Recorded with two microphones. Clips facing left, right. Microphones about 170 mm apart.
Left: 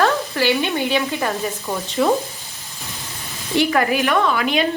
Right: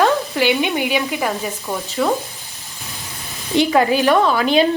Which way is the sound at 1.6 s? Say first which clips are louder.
Left 1 dB; centre (ahead or behind).